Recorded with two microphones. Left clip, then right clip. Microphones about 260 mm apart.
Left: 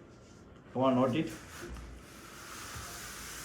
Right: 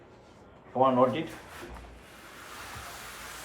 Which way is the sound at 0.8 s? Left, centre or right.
Left.